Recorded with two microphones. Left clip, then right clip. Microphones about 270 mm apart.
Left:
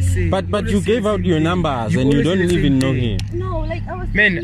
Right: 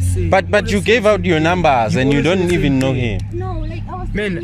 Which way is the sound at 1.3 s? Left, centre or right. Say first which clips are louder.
Right 5 dB; right.